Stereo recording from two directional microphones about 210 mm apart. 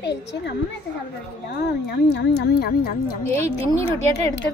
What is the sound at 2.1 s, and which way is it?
Speech, 50° left (ahead or behind).